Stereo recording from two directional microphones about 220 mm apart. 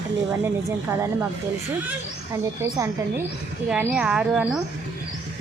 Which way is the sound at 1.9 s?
10° right (ahead or behind).